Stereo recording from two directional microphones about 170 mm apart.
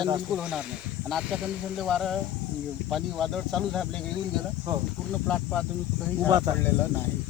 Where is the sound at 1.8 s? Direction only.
Centre (ahead or behind).